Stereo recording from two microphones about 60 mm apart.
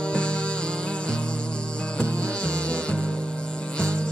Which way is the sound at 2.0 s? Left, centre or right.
Centre.